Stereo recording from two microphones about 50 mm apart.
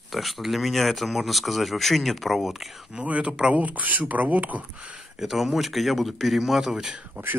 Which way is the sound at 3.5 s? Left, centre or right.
Right.